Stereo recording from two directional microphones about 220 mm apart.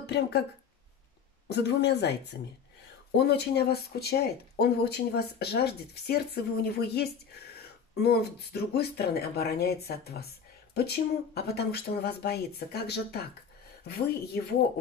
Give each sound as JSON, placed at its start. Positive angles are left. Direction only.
{"t": 0.0, "sound": "speech", "side_deg": 50}
{"t": 1.5, "sound": "speech", "side_deg": 50}